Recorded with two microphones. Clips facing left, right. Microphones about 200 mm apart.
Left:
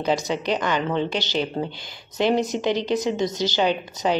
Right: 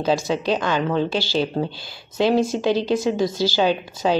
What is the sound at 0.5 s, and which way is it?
Speech, 10° right (ahead or behind).